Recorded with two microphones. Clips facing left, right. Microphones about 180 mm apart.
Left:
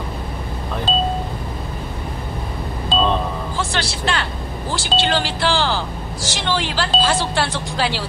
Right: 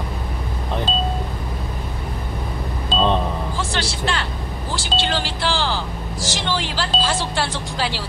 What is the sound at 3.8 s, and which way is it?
Speech, 65° left (ahead or behind).